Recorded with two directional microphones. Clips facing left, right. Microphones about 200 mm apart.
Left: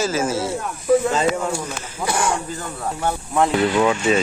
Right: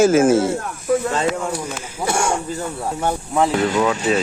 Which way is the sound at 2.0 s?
25° right (ahead or behind).